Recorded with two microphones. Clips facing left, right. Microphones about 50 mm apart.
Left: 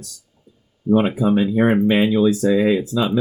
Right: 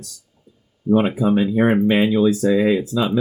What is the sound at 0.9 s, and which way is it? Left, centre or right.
Speech, right.